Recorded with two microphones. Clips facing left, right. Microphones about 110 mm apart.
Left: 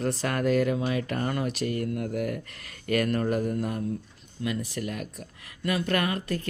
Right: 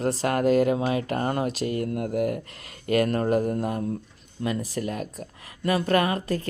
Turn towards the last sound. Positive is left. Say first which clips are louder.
# right 3 dB
turn(degrees=-35)  # may be behind; listen again after turning